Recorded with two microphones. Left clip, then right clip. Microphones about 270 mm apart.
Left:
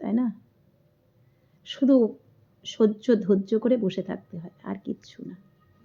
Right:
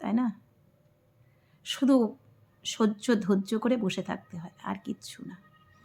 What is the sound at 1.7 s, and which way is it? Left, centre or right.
Speech, centre.